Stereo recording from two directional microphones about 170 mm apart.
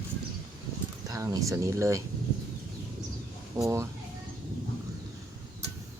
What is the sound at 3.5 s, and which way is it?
Speech, 15° right (ahead or behind).